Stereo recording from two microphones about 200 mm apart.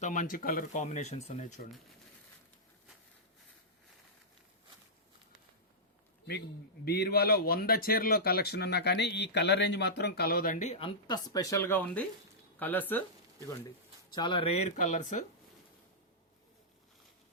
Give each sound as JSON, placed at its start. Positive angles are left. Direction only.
{"t": 0.0, "sound": "speech", "side_deg": 40}
{"t": 6.8, "sound": "speech", "side_deg": 55}
{"t": 14.1, "sound": "speech", "side_deg": 25}